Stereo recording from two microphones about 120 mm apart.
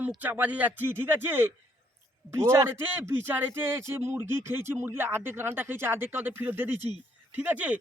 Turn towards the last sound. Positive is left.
turn(degrees=-15)  # may be behind; listen again after turning